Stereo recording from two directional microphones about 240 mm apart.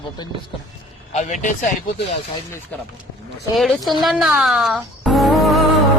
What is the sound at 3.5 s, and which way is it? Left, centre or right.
Speech, centre.